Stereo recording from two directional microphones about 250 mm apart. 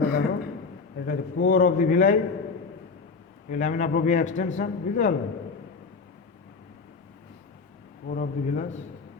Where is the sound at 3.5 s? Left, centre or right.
Left.